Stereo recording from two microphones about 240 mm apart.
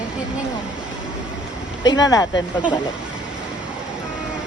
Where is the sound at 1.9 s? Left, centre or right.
Centre.